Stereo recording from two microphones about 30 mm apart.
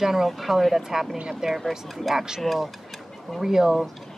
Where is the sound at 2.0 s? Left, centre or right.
Centre.